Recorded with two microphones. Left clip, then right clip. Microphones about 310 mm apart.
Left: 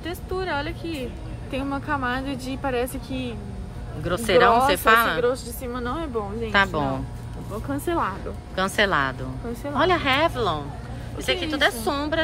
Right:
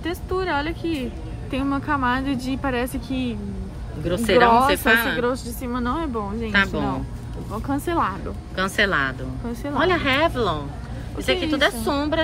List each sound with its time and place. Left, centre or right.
0.0 s music: right
1.5 s speech: right
4.0 s speech: centre
5.2 s speech: right
6.5 s speech: centre
7.6 s speech: centre
8.5 s a woman's voice: centre